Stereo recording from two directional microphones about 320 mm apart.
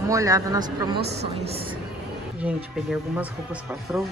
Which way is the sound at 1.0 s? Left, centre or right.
Right.